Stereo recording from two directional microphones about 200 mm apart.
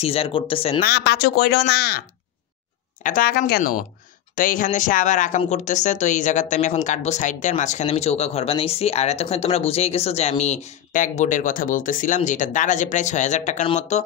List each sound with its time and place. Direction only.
0.0 s speech: 30° left (ahead or behind)
0.7 s speech: 55° left (ahead or behind); by 14.0 s 35° left (ahead or behind)